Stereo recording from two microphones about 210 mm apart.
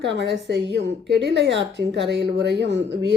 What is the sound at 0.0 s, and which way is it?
Speech, 55° right (ahead or behind).